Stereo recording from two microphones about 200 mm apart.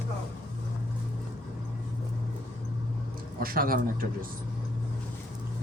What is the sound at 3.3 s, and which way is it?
Speech, 45° right (ahead or behind).